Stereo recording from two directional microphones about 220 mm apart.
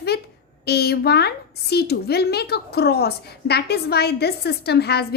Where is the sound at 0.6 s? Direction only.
45° left (ahead or behind).